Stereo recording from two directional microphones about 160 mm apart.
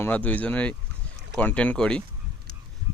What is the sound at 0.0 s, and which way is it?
Speech, 10° left (ahead or behind).